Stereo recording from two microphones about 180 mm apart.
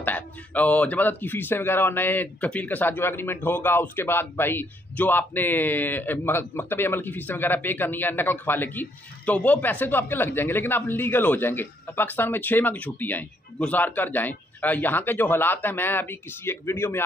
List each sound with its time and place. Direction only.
0.0 s speech: 10° left (ahead or behind)